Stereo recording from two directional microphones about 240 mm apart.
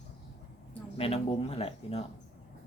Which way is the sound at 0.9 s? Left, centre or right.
Left.